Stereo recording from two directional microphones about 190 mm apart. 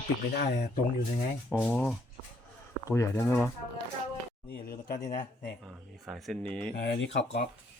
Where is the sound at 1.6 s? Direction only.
5° left (ahead or behind).